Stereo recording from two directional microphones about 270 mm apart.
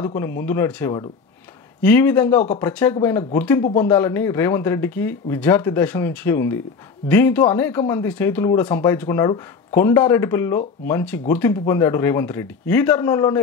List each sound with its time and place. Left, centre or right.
0.0 s speech: centre